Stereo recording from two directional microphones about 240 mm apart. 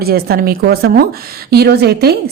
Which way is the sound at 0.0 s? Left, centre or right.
Right.